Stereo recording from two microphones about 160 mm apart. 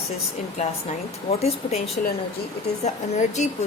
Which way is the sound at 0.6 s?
45° left (ahead or behind).